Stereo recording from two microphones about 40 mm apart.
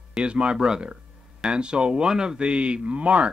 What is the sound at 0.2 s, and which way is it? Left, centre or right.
Speech, right.